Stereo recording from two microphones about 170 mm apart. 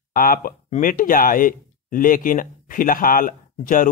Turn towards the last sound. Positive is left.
turn(degrees=55)  # may be behind; listen again after turning